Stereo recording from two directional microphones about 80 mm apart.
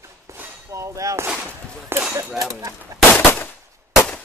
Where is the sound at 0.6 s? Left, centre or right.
Right.